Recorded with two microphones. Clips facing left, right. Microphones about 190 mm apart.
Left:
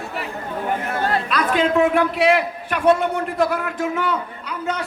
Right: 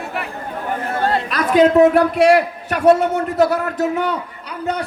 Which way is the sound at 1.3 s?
40° right (ahead or behind).